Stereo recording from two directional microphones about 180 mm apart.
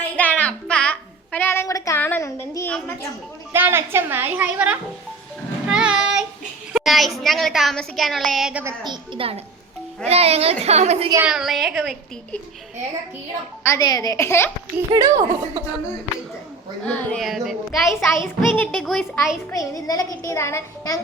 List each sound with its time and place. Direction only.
0.2 s music: 10° left (ahead or behind)
2.7 s a child's voice: 10° left (ahead or behind)
3.5 s a woman's voice: 10° right (ahead or behind)
5.6 s child singing: 5° right (ahead or behind)
6.7 s a woman's voice: centre (ahead or behind)
8.6 s a woman's voice: 25° right (ahead or behind)
11.3 s a woman's voice: centre (ahead or behind)
13.7 s a child's voice: 20° left (ahead or behind)
14.8 s a woman's voice: 20° right (ahead or behind)
16.8 s a woman's voice: 5° left (ahead or behind)
17.8 s a child's voice: 15° left (ahead or behind)
19.5 s a woman's voice: 20° left (ahead or behind)